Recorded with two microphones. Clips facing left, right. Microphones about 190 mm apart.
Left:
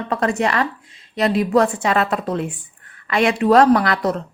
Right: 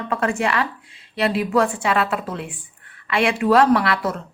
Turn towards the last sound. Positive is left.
turn(degrees=40)  # may be behind; listen again after turning